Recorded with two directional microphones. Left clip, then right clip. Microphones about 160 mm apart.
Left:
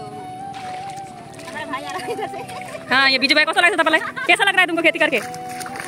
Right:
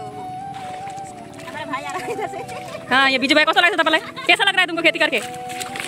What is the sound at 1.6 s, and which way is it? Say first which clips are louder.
Speech: right 1 dB; 15° left (ahead or behind).